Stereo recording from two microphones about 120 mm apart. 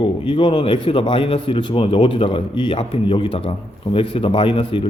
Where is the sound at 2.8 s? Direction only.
55° left (ahead or behind).